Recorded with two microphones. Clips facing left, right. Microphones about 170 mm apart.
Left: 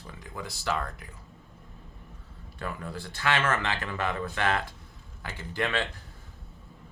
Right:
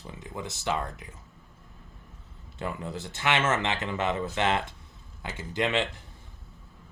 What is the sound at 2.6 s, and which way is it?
Speech, 20° right (ahead or behind).